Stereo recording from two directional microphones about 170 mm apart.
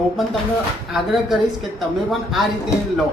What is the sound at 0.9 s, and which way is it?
Speech, centre (ahead or behind).